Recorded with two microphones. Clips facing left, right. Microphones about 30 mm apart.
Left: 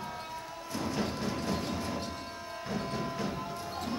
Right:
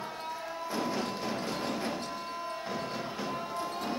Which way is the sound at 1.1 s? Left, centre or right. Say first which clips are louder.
Even; centre.